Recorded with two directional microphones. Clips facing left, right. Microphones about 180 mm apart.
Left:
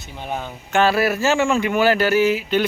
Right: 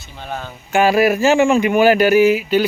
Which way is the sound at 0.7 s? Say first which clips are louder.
Right 4 dB; 10° right (ahead or behind).